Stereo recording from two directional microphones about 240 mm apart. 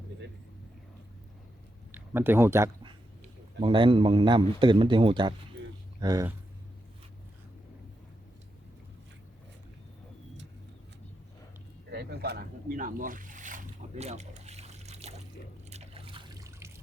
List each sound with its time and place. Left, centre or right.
1.9 s a man's voice: centre
11.9 s boat: right
15.7 s trickle: right